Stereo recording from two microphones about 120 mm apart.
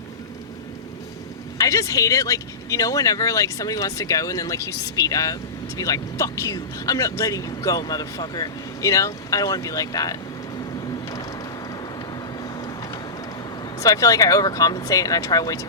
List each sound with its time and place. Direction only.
1.5 s speech: 25° left (ahead or behind)
12.4 s vehicle: 35° left (ahead or behind)
13.7 s speech: 30° left (ahead or behind)